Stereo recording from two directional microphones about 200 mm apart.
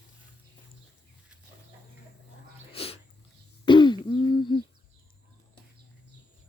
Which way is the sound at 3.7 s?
20° left (ahead or behind).